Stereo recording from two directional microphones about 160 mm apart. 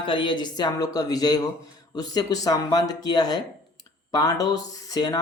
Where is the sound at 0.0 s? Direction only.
30° left (ahead or behind).